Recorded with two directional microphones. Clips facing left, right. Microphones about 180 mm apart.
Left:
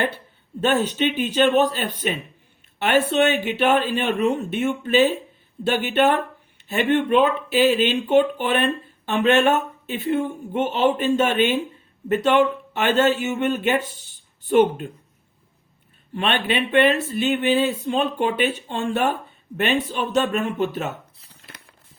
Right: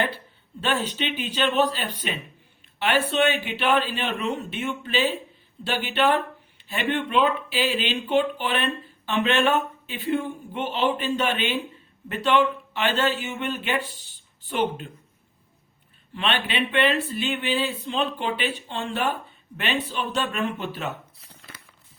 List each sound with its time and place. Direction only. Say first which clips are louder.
0.6 s speech: left 6 dB; 45° left (ahead or behind)
16.5 s speech: left 6 dB; 50° left (ahead or behind)